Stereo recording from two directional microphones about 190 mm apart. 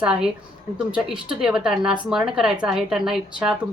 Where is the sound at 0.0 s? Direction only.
5° right (ahead or behind).